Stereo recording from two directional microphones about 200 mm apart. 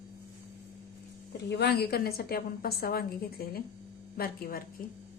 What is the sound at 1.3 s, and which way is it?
A woman's voice, 55° left (ahead or behind).